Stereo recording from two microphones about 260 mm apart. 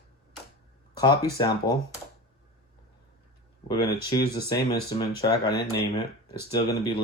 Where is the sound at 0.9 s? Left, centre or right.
Centre.